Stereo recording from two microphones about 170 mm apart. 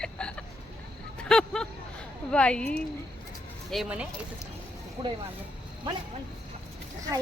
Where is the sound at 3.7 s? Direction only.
5° right (ahead or behind).